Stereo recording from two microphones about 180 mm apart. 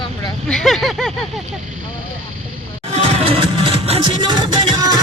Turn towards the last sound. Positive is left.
turn(degrees=-25)  # may be behind; listen again after turning